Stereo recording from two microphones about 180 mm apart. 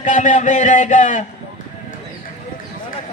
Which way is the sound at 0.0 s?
45° left (ahead or behind).